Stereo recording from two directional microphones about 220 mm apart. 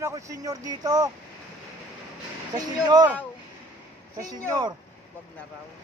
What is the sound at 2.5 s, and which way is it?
Speech, 20° right (ahead or behind).